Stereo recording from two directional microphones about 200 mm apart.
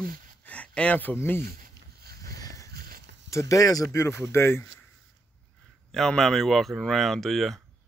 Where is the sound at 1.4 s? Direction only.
50° right (ahead or behind).